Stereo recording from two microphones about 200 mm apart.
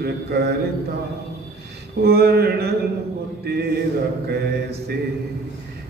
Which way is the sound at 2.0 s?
50° right (ahead or behind).